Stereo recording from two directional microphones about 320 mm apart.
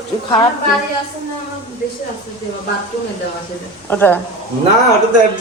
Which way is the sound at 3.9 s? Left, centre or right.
Centre.